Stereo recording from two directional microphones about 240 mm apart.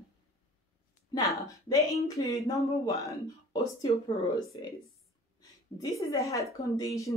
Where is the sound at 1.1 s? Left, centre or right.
Centre.